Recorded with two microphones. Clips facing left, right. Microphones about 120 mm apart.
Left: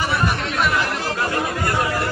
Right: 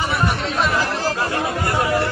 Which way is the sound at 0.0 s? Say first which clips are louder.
Even; 20° right (ahead or behind).